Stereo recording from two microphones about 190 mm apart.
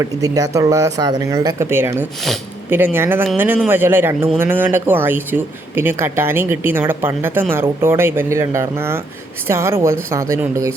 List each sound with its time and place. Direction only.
0.0 s speech: 20° right (ahead or behind)